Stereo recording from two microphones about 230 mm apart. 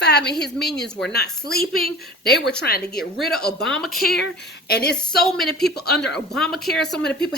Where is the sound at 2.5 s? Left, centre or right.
Left.